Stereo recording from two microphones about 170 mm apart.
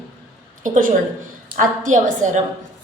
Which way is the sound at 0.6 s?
55° right (ahead or behind).